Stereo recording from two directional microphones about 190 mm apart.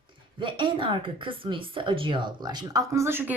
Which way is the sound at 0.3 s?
25° right (ahead or behind).